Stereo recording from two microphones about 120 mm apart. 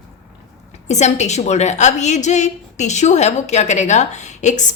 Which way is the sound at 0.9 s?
70° left (ahead or behind).